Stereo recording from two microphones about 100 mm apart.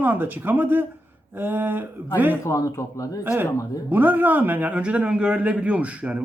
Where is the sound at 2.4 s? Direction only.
30° left (ahead or behind).